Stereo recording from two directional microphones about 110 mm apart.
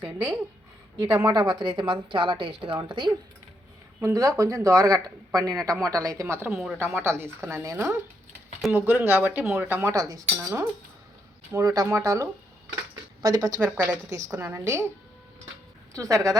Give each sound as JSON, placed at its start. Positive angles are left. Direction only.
{"t": 0.9, "sound": "a woman's voice", "side_deg": -35}
{"t": 4.0, "sound": "speech", "side_deg": -30}
{"t": 6.5, "sound": "speech", "side_deg": -5}
{"t": 6.7, "sound": "speech", "side_deg": -20}
{"t": 8.7, "sound": "speech", "side_deg": -15}
{"t": 9.9, "sound": "speech", "side_deg": -30}
{"t": 13.6, "sound": "speech", "side_deg": -10}
{"t": 15.9, "sound": "speech", "side_deg": -30}